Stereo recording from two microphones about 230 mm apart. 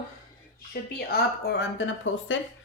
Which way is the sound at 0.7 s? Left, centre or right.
Left.